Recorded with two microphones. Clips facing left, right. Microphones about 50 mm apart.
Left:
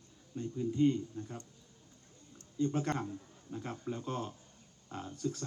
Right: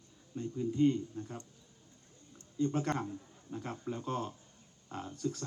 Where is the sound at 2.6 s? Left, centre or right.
Right.